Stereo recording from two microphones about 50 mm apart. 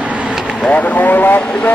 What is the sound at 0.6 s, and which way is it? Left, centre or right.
Speech, left.